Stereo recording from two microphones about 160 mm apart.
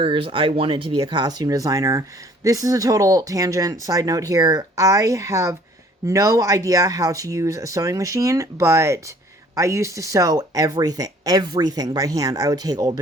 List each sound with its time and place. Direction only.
0.0 s speech: 35° right (ahead or behind)